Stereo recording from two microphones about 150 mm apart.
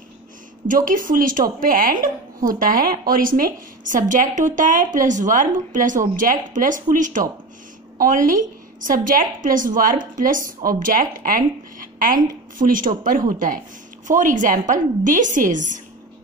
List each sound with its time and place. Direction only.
0.7 s a woman's voice: 65° right (ahead or behind)